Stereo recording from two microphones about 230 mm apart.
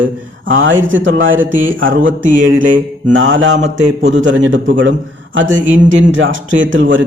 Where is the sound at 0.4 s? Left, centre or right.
Right.